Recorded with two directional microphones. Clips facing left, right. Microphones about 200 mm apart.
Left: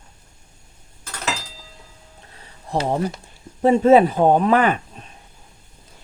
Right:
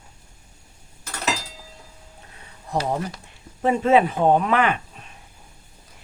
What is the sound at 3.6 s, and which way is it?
Speech, 35° left (ahead or behind).